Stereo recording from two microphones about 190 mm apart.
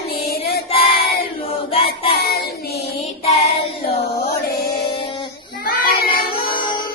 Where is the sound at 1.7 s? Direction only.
30° left (ahead or behind).